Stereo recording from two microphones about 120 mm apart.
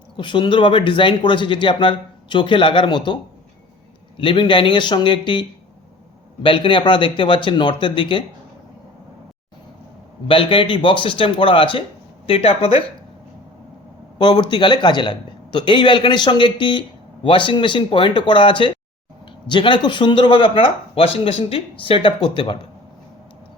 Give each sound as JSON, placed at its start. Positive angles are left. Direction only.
{"t": 0.2, "sound": "speech", "side_deg": 45}
{"t": 4.2, "sound": "speech", "side_deg": 40}
{"t": 10.2, "sound": "speech", "side_deg": 45}
{"t": 14.2, "sound": "speech", "side_deg": 40}